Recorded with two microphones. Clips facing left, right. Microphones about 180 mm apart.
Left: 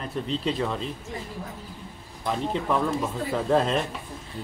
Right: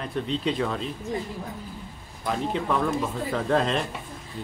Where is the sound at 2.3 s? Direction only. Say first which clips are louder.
Even; centre (ahead or behind).